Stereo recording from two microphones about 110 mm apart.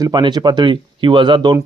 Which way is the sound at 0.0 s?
40° right (ahead or behind).